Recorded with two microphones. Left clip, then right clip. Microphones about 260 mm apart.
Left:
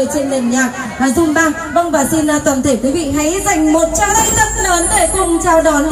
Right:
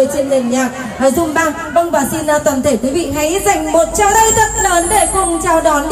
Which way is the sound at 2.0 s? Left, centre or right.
Right.